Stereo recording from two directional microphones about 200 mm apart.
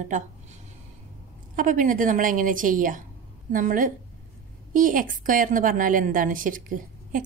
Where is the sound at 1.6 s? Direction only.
40° right (ahead or behind).